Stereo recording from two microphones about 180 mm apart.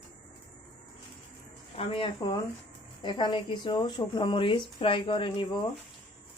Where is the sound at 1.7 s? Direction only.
30° left (ahead or behind).